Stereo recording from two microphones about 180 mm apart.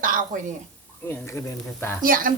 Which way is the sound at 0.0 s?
50° right (ahead or behind).